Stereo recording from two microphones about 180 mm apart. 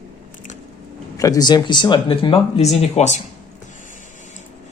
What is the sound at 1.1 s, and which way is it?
Speech, 20° left (ahead or behind).